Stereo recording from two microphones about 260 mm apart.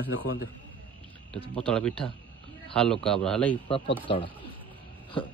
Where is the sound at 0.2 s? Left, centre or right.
Left.